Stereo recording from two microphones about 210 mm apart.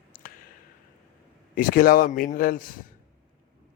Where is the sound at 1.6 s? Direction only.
40° left (ahead or behind).